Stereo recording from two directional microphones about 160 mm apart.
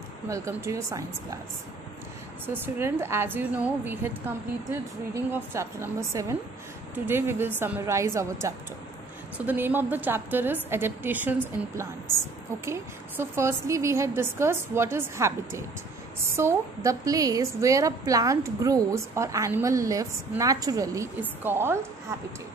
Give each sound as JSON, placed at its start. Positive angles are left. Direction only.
{"t": 0.3, "sound": "a woman's voice", "side_deg": -20}
{"t": 2.4, "sound": "a woman's voice", "side_deg": -15}
{"t": 5.1, "sound": "a woman's voice", "side_deg": -15}